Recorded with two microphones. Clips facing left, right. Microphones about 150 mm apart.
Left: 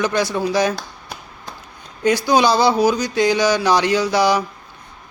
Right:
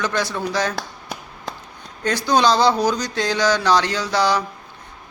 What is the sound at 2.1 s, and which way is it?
Speech, 10° left (ahead or behind).